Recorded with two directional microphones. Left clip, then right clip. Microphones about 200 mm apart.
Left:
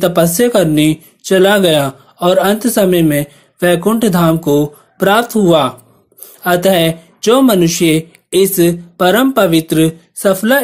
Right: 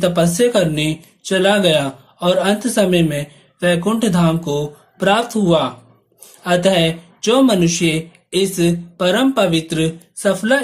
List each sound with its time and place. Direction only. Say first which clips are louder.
0.0 s speech: left 4 dB; 35° left (ahead or behind)